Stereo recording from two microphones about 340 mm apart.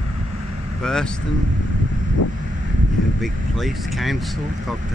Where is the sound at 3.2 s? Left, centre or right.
Centre.